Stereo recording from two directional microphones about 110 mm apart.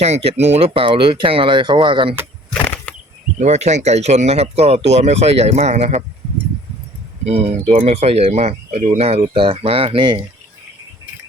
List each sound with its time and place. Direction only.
0.0 s speech: 70° right (ahead or behind); by 2.1 s 50° right (ahead or behind)
2.5 s a sound: 15° left (ahead or behind)
3.4 s speech: 90° right
7.3 s speech: 70° right (ahead or behind)
9.3 s speech: 55° right (ahead or behind)